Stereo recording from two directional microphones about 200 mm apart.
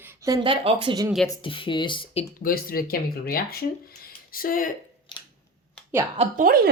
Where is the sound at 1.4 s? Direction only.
25° left (ahead or behind).